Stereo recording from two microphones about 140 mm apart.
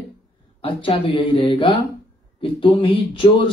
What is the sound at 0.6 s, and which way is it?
Speech, 40° left (ahead or behind).